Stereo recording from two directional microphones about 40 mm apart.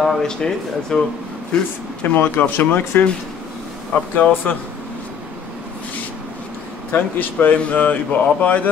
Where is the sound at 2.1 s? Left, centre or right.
Left.